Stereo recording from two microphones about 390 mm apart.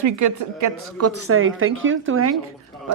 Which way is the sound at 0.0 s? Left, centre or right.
Right.